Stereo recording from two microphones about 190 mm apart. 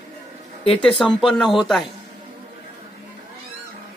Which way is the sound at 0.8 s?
5° left (ahead or behind).